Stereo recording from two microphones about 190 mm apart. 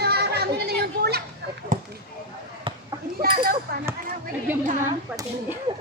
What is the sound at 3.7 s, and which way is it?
Speech, 55° right (ahead or behind).